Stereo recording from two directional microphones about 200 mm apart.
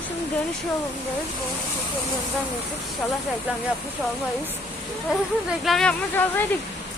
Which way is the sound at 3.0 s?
5° left (ahead or behind).